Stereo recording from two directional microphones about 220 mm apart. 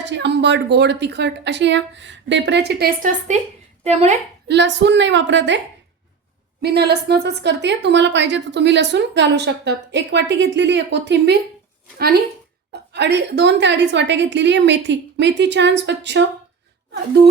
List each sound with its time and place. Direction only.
0.0 s a woman's voice: 55° right (ahead or behind); by 4.2 s 30° right (ahead or behind)
4.4 s a woman's voice: 50° right (ahead or behind)
6.6 s a woman's voice: 50° right (ahead or behind)